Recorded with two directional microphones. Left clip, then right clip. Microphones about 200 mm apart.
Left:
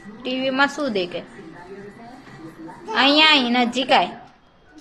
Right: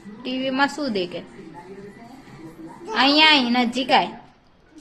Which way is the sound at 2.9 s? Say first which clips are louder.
Left 1 dB; 30° right (ahead or behind).